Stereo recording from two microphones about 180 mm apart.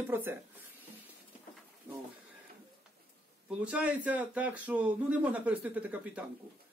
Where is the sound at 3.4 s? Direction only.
5° right (ahead or behind).